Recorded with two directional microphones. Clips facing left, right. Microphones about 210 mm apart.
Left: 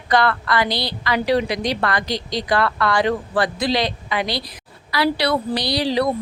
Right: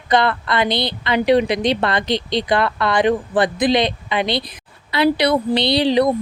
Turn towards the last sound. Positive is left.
turn(degrees=-20)  # may be behind; listen again after turning